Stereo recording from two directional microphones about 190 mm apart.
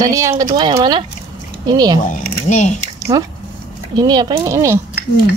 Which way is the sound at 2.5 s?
40° left (ahead or behind).